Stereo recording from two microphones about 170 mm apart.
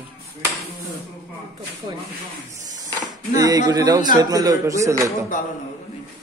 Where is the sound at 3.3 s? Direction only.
20° right (ahead or behind).